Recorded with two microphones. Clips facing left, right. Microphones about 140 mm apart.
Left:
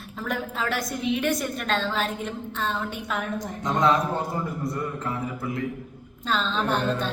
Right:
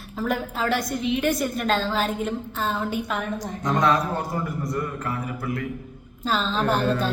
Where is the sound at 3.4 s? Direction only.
20° left (ahead or behind).